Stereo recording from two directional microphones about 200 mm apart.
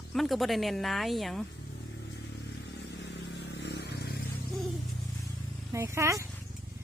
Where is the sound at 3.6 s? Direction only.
60° left (ahead or behind).